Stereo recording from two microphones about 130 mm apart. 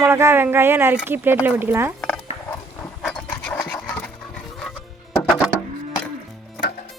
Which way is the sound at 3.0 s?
5° left (ahead or behind).